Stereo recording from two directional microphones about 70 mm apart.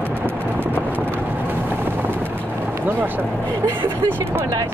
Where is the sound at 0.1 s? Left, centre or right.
Right.